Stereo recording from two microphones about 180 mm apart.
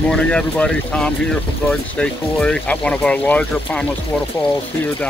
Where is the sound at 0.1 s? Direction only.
5° left (ahead or behind).